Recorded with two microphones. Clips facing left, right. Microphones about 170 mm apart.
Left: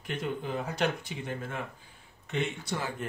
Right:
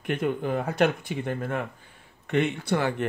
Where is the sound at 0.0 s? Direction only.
60° right (ahead or behind).